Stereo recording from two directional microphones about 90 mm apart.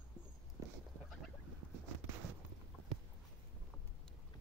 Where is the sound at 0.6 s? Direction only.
40° right (ahead or behind).